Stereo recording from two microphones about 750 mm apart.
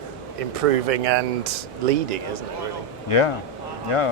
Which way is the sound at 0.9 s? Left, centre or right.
Right.